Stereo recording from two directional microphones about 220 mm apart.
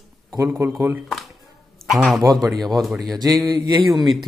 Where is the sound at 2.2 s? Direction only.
15° right (ahead or behind).